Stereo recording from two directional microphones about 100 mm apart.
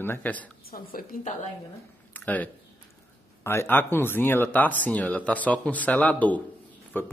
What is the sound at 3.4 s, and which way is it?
A man's voice, 25° left (ahead or behind).